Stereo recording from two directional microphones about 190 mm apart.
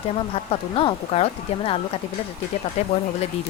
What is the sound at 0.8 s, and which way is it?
Speech, 30° left (ahead or behind).